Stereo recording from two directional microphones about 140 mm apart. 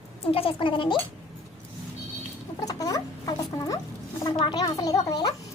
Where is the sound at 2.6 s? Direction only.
25° left (ahead or behind).